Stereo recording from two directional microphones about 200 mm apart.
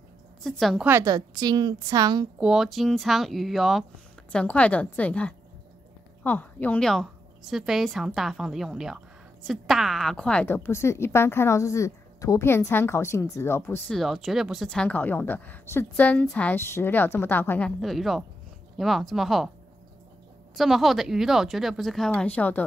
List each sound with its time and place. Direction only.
0.4 s a woman's voice: centre (ahead or behind)
0.8 s a woman's voice: 15° right (ahead or behind)
2.4 s a woman's voice: centre (ahead or behind); by 13.7 s 15° left (ahead or behind)
13.8 s a woman's voice: centre (ahead or behind)
20.5 s a woman's voice: centre (ahead or behind)